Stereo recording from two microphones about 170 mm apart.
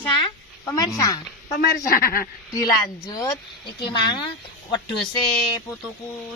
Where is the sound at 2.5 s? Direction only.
20° left (ahead or behind).